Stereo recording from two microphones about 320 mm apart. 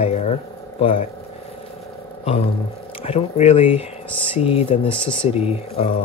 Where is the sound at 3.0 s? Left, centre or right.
Centre.